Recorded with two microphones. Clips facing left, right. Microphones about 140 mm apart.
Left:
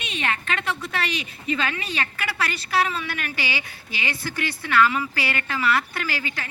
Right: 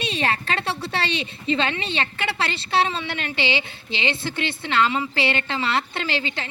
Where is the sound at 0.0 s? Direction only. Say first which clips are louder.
Right 4 dB; 30° right (ahead or behind).